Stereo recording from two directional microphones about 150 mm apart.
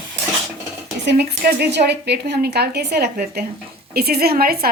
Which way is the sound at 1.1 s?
90° right.